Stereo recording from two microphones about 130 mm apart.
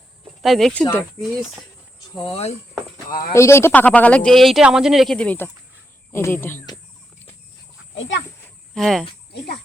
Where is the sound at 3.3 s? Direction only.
20° left (ahead or behind).